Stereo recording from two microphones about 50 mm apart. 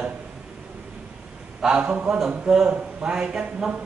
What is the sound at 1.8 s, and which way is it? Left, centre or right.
A man's voice, right.